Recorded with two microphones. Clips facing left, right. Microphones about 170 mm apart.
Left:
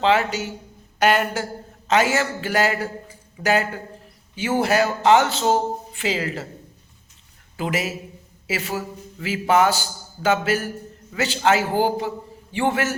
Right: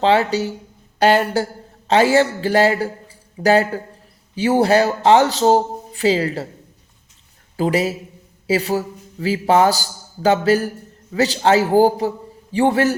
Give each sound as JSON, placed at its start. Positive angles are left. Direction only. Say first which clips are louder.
{"t": 0.0, "sound": "a man's voice", "louder": "right 4 dB", "side_deg": -35}
{"t": 7.5, "sound": "a man's voice", "louder": "right 7 dB", "side_deg": -35}